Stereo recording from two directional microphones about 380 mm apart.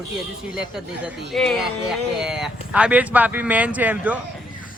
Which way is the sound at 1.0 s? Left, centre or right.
Centre.